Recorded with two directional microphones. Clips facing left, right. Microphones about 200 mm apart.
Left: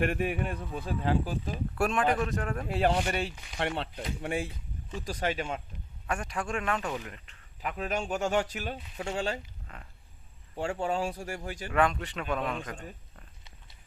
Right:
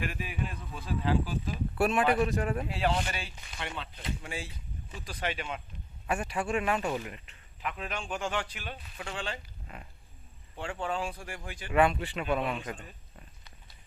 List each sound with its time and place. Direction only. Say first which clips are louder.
0.0 s speech: left 7 dB; 60° left (ahead or behind)
1.7 s speech: right 1 dB; 5° right (ahead or behind)
2.6 s speech: left 3 dB; 50° left (ahead or behind)
4.9 s speech: left 4 dB; 40° left (ahead or behind)
6.1 s speech: right 2 dB; 5° right (ahead or behind)
7.6 s speech: left 5 dB; 40° left (ahead or behind)
9.7 s speech: right 3 dB; 5° right (ahead or behind)
10.5 s speech: left 4 dB; 40° left (ahead or behind)
11.7 s speech: right 2 dB; 5° right (ahead or behind)